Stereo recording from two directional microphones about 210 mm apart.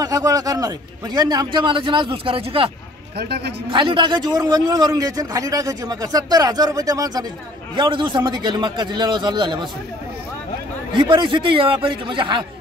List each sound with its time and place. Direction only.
0.0 s a man's voice: 15° right (ahead or behind)
3.2 s a man's voice: 50° right (ahead or behind)
3.7 s a man's voice: 25° right (ahead or behind)
11.0 s a man's voice: 20° right (ahead or behind)